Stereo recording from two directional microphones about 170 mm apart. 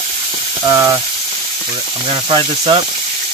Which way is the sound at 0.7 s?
20° right (ahead or behind).